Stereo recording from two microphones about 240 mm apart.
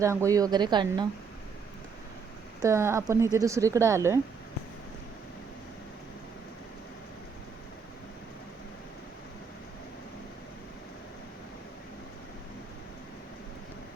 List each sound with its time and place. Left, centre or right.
0.0 s speech: centre
2.6 s speech: centre